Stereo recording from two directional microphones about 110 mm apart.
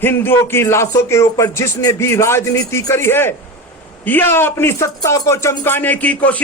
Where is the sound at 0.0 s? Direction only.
20° left (ahead or behind).